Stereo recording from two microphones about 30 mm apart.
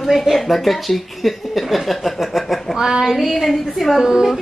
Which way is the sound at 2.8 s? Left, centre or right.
Centre.